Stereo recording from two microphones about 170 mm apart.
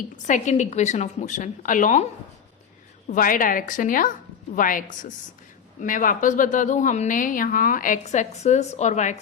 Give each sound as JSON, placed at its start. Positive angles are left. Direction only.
{"t": 0.3, "sound": "a woman's voice", "side_deg": 45}
{"t": 3.1, "sound": "a woman's voice", "side_deg": 55}